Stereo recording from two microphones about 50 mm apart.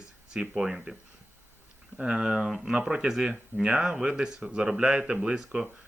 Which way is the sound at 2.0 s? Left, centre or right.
Centre.